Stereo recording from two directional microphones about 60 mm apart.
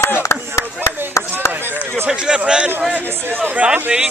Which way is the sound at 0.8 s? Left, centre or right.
Right.